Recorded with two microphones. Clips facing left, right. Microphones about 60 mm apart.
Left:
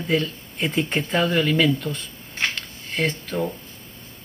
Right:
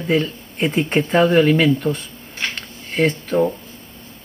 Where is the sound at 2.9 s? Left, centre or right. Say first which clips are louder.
Right 6 dB; right.